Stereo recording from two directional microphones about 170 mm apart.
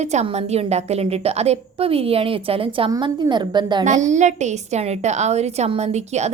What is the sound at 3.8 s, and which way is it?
A woman's voice, 45° right (ahead or behind).